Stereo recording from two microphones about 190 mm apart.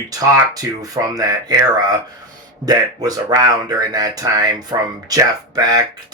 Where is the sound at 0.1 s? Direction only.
20° right (ahead or behind).